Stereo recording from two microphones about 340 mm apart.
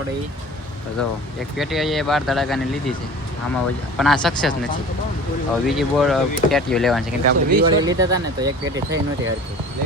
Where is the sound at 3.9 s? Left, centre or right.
Centre.